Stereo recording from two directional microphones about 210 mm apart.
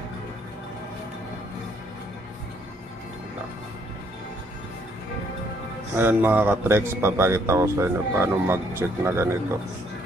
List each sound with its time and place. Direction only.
5.9 s speech: 10° right (ahead or behind)